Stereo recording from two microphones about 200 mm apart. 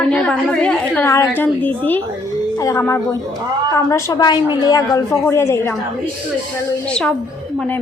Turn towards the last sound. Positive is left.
turn(degrees=5)  # may be behind; listen again after turning